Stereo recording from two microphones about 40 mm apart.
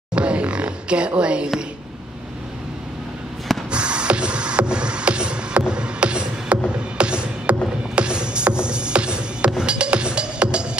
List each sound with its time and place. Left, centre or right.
0.1 s music: right
3.7 s music: right
6.5 s music: right
7.0 s music: right
7.5 s music: right
7.9 s music: right